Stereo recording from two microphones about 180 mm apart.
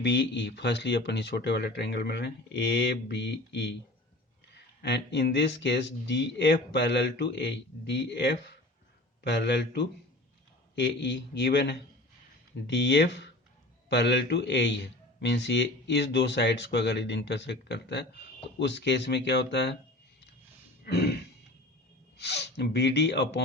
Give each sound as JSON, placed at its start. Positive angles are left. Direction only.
{"t": 0.0, "sound": "speech", "side_deg": 75}
{"t": 4.8, "sound": "speech", "side_deg": 70}
{"t": 20.8, "sound": "throat clearing", "side_deg": 65}
{"t": 22.2, "sound": "speech", "side_deg": 70}